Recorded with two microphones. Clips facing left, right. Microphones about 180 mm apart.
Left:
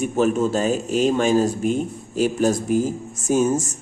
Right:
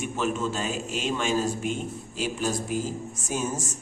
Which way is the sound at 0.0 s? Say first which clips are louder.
Left 9 dB; 40° left (ahead or behind).